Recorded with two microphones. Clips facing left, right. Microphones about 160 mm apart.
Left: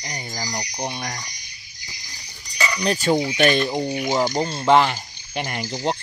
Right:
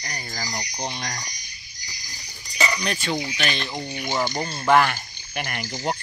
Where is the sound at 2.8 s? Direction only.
35° left (ahead or behind).